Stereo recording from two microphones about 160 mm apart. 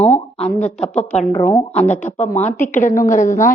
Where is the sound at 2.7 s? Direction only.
55° left (ahead or behind).